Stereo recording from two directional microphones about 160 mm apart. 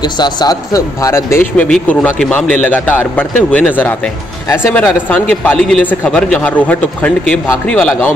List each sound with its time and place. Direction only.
0.0 s a man's voice: 25° left (ahead or behind); by 8.1 s 5° left (ahead or behind)